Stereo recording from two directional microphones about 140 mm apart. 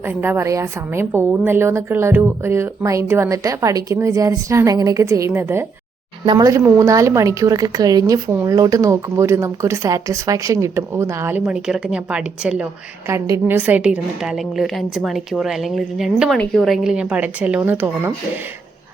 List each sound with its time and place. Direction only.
0.0 s a woman's voice: 15° right (ahead or behind)
6.2 s a woman's voice: 30° right (ahead or behind); by 12.6 s 5° right (ahead or behind)
13.1 s a woman's voice: 20° right (ahead or behind)